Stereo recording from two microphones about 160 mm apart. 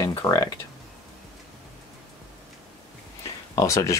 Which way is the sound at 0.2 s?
20° left (ahead or behind).